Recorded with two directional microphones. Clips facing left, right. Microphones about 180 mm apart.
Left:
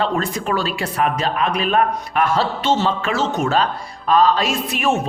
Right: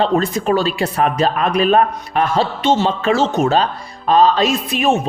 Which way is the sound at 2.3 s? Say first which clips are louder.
Right 3 dB; 15° right (ahead or behind).